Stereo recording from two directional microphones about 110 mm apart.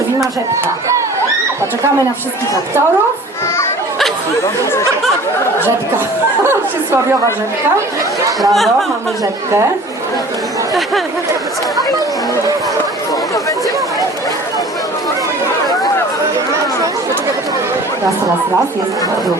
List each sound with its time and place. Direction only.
6.5 s speech: 25° right (ahead or behind)
8.4 s speech: centre (ahead or behind)